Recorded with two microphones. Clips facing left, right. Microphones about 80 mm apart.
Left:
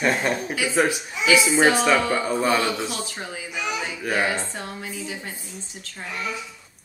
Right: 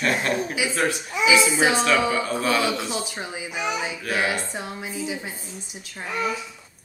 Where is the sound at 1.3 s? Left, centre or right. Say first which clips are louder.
Left 2 dB; centre.